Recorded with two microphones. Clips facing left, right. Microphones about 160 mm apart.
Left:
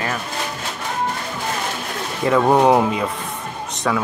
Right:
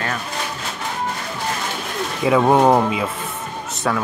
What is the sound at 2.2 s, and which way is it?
Speech, 5° right (ahead or behind).